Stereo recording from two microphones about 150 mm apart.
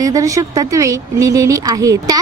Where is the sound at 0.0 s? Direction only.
20° right (ahead or behind).